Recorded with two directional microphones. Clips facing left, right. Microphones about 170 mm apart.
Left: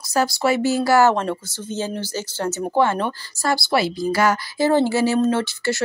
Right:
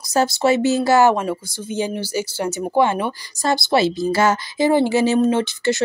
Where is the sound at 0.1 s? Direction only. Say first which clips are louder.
Right 3 dB; 25° right (ahead or behind).